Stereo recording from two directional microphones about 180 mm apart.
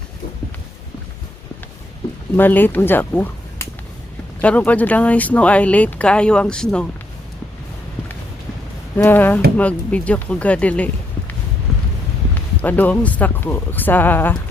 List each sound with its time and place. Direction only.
2.3 s speech: 10° left (ahead or behind)
9.0 s speech: 10° left (ahead or behind)
11.7 s a sound: centre (ahead or behind)
12.3 s speech: 10° left (ahead or behind)